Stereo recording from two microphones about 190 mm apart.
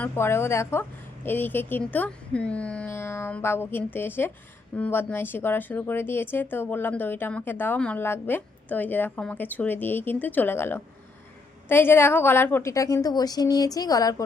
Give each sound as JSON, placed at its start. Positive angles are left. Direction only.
{"t": 0.0, "sound": "speech", "side_deg": 15}